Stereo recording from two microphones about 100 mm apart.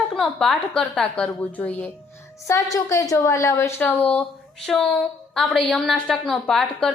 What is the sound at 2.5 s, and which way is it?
A woman's voice, 35° left (ahead or behind).